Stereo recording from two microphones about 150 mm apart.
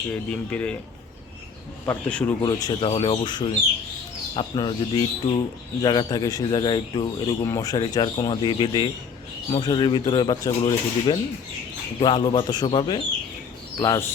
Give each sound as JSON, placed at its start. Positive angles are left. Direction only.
{"t": 0.1, "sound": "speech", "side_deg": 10}
{"t": 1.9, "sound": "speech", "side_deg": 10}
{"t": 2.4, "sound": "a man's voice", "side_deg": 25}
{"t": 2.9, "sound": "speech", "side_deg": 45}
{"t": 3.2, "sound": "a man's voice", "side_deg": 30}